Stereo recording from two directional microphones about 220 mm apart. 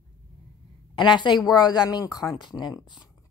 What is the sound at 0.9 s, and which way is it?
A woman's voice, 20° left (ahead or behind).